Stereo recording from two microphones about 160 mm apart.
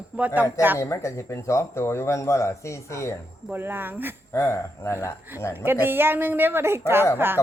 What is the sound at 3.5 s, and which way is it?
Speech, 15° right (ahead or behind).